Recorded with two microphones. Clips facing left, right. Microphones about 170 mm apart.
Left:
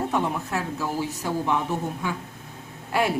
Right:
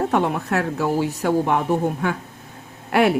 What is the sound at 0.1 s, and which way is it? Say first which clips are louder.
Speech: right 5 dB; 65° right (ahead or behind).